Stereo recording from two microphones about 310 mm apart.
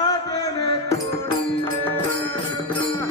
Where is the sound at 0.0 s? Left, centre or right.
Centre.